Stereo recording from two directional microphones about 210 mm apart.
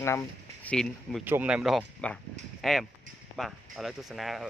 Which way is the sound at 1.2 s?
10° right (ahead or behind).